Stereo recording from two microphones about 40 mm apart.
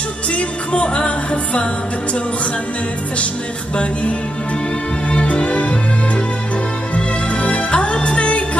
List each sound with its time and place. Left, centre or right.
0.3 s music: left
5.1 s music: left
7.0 s music: left